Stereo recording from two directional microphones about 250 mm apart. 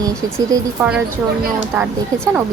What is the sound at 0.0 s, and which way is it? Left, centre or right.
Music, centre.